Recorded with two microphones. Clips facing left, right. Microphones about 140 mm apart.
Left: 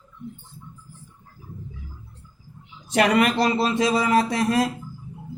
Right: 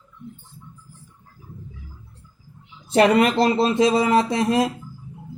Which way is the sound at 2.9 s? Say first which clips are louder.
Right 3 dB; 30° right (ahead or behind).